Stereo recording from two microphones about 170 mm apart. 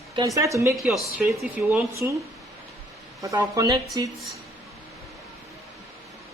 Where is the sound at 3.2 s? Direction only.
20° right (ahead or behind).